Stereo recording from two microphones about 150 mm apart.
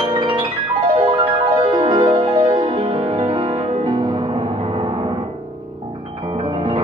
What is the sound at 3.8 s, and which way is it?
Music, 30° right (ahead or behind).